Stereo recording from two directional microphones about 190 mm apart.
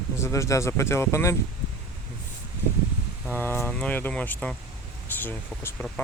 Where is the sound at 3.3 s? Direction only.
10° left (ahead or behind).